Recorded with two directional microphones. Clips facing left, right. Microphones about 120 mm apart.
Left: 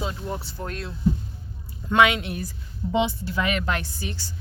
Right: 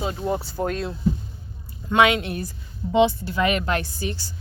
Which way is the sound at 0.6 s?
65° right (ahead or behind).